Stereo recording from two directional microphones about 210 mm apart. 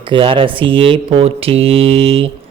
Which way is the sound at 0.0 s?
25° right (ahead or behind).